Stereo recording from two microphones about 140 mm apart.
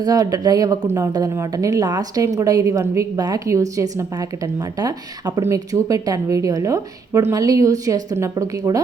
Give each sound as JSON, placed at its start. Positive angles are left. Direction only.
{"t": 0.0, "sound": "a woman's voice", "side_deg": -25}